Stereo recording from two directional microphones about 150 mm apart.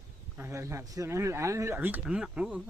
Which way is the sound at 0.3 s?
15° right (ahead or behind).